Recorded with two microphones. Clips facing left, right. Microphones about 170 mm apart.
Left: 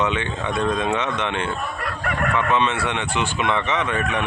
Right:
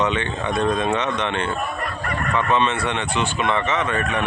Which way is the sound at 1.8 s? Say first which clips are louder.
Left 1 dB; 85° left.